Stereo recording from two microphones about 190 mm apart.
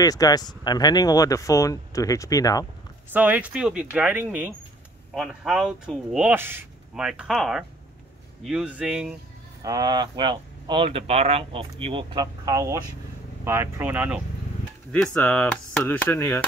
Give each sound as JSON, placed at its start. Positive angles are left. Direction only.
{"t": 0.0, "sound": "speech", "side_deg": 20}
{"t": 3.1, "sound": "speech", "side_deg": -10}
{"t": 5.1, "sound": "speech", "side_deg": 0}
{"t": 9.6, "sound": "speech", "side_deg": -20}
{"t": 14.9, "sound": "speech", "side_deg": 5}